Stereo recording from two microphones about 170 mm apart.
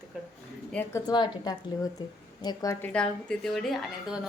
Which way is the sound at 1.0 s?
25° left (ahead or behind).